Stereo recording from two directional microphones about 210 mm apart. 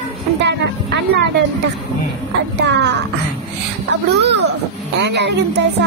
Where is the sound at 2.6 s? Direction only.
55° right (ahead or behind).